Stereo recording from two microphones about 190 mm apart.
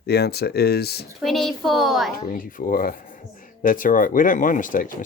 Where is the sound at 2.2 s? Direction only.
45° left (ahead or behind).